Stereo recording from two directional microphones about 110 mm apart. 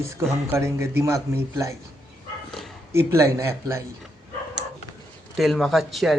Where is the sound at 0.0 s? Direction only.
25° right (ahead or behind).